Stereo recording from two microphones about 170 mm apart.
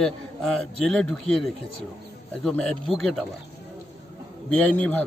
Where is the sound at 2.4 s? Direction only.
5° left (ahead or behind).